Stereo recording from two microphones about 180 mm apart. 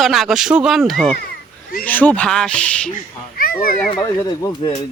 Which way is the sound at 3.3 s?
55° left (ahead or behind).